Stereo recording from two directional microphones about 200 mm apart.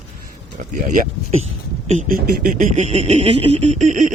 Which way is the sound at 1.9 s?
40° right (ahead or behind).